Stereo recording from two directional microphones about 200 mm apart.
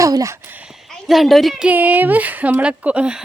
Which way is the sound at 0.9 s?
Centre (ahead or behind).